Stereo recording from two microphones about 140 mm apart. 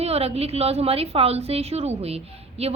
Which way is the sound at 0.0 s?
45° right (ahead or behind).